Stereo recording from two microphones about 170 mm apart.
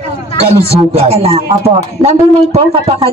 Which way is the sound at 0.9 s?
40° right (ahead or behind).